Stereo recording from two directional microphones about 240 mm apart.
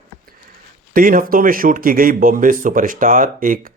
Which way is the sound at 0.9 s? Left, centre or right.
Right.